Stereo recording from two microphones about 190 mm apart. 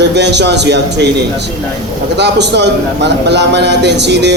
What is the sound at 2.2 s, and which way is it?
Speech, 65° right (ahead or behind).